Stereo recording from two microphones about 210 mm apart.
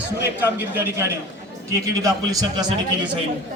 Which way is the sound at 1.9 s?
15° right (ahead or behind).